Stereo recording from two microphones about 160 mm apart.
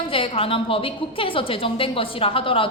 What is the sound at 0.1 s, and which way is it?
A woman's voice, 35° left (ahead or behind).